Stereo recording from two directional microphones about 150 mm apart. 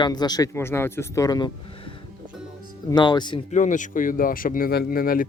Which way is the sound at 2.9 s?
30° left (ahead or behind).